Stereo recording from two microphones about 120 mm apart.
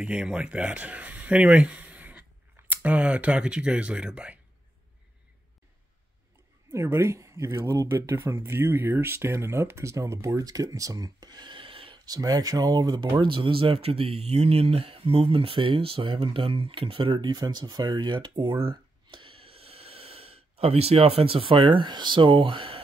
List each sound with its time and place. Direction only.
0.0 s speech: 10° right (ahead or behind)
6.7 s speech: 20° right (ahead or behind); by 12.0 s 50° right (ahead or behind)
12.0 s speech: 30° right (ahead or behind)